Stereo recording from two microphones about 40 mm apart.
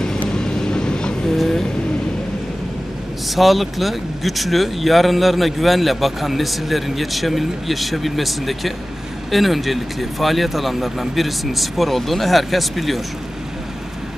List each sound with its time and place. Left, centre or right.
0.3 s vehicle: centre
3.3 s speech: centre